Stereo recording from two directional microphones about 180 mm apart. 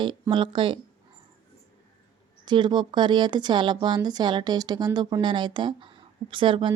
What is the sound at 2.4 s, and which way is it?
Speech, 25° right (ahead or behind).